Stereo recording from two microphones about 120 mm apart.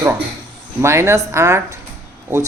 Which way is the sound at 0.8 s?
20° right (ahead or behind).